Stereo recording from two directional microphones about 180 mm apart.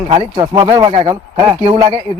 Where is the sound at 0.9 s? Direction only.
35° right (ahead or behind).